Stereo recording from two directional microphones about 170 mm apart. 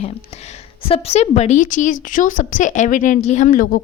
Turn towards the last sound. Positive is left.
turn(degrees=55)  # may be behind; listen again after turning